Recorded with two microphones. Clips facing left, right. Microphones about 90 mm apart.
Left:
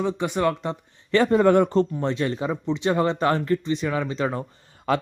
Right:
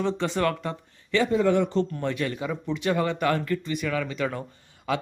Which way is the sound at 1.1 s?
50° left (ahead or behind).